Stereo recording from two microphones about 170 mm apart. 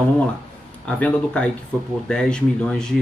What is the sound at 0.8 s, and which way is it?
Speech, 5° left (ahead or behind).